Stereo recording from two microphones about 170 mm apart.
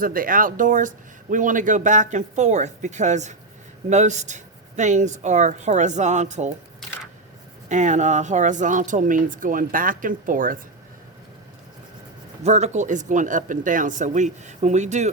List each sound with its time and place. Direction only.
0.0 s speech: 55° right (ahead or behind)
7.7 s speech: 45° right (ahead or behind)
12.5 s speech: 40° right (ahead or behind)